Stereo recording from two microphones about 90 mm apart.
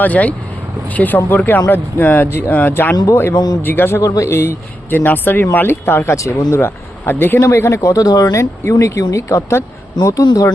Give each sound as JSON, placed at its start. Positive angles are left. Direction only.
{"t": 0.0, "sound": "speech", "side_deg": 15}
{"t": 3.3, "sound": "speech", "side_deg": 45}
{"t": 3.6, "sound": "speech", "side_deg": 25}